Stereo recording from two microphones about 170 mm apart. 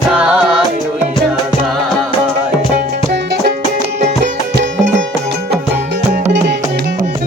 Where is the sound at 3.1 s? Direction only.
80° right.